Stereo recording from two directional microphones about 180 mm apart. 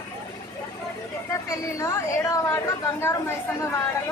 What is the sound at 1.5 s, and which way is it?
A woman's voice, 15° left (ahead or behind).